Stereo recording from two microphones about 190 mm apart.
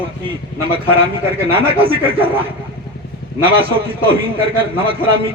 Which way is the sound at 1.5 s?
30° right (ahead or behind).